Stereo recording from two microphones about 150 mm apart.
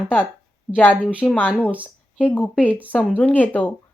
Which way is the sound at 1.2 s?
10° left (ahead or behind).